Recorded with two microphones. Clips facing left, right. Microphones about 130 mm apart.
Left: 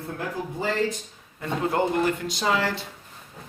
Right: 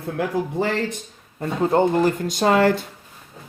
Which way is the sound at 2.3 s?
50° right (ahead or behind).